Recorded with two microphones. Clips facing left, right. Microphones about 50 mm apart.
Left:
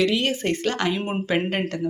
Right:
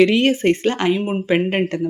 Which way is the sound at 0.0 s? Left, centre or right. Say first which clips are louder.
Right 7 dB; right.